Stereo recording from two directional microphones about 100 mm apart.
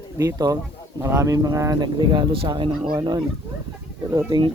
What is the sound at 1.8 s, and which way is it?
Speech, 45° right (ahead or behind).